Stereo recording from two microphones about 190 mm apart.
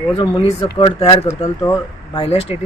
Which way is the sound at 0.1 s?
30° left (ahead or behind).